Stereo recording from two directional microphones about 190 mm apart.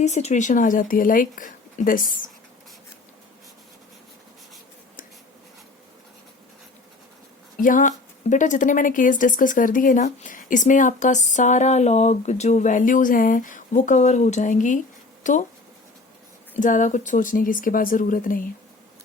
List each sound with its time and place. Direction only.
0.0 s speech: 35° left (ahead or behind)
7.6 s speech: 45° left (ahead or behind)
16.6 s speech: 40° left (ahead or behind)